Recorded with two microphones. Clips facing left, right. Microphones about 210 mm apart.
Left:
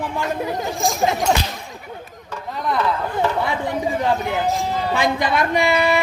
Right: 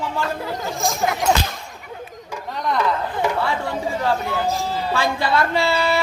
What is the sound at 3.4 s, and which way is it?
A man's voice, 20° left (ahead or behind).